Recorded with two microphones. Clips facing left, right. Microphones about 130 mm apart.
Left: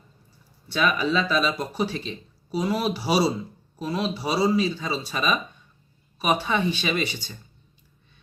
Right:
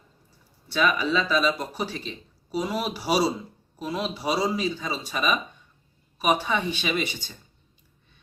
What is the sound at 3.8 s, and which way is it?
Speech, 10° right (ahead or behind).